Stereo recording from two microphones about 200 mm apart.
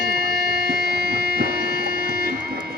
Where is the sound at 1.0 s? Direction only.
50° right (ahead or behind).